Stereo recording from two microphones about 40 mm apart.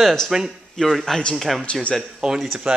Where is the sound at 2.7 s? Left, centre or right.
Right.